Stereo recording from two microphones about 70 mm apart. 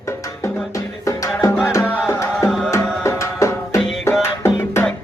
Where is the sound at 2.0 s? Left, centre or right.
Left.